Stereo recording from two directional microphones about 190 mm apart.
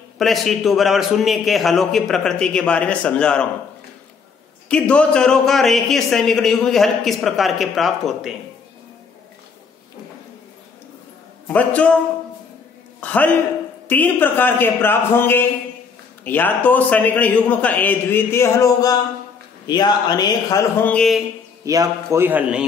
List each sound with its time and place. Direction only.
0.2 s a man's voice: centre (ahead or behind)
4.6 s a man's voice: 5° left (ahead or behind)
11.4 s a man's voice: 5° left (ahead or behind)
13.0 s a man's voice: 10° left (ahead or behind)
20.9 s a man's voice: 5° left (ahead or behind)
21.6 s a man's voice: 15° right (ahead or behind)